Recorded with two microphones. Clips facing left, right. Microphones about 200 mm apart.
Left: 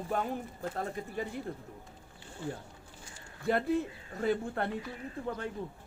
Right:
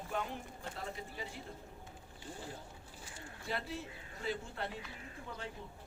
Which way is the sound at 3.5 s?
55° left (ahead or behind).